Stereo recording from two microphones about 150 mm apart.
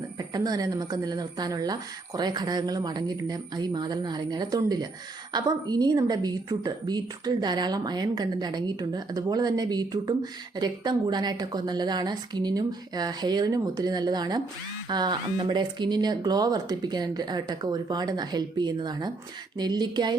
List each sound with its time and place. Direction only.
0.2 s a woman's voice: 25° right (ahead or behind)